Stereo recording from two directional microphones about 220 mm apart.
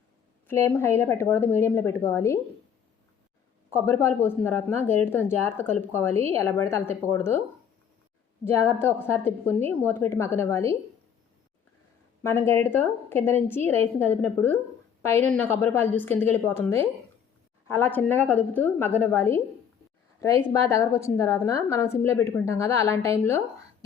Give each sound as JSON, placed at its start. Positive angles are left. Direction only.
{"t": 0.4, "sound": "a woman's voice", "side_deg": 10}
{"t": 3.8, "sound": "a woman's voice", "side_deg": 10}
{"t": 8.4, "sound": "a woman's voice", "side_deg": 10}
{"t": 12.2, "sound": "a woman's voice", "side_deg": 10}